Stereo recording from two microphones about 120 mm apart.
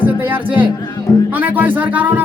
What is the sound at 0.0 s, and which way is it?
Music, 15° right (ahead or behind).